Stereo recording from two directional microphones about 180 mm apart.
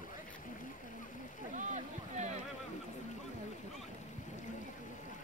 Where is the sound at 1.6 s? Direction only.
40° right (ahead or behind).